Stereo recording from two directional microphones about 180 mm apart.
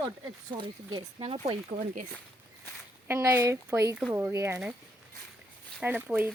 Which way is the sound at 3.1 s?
15° right (ahead or behind).